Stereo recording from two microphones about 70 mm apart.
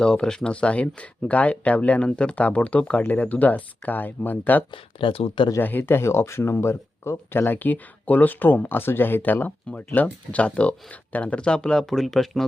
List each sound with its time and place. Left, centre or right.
0.0 s speech: centre